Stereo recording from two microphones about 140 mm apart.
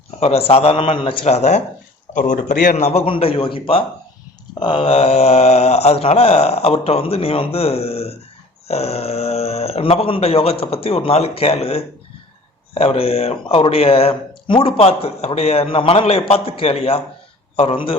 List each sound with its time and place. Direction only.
0.2 s speech: 45° left (ahead or behind)
2.1 s speech: 65° left (ahead or behind)
2.7 s a man's voice: 50° left (ahead or behind)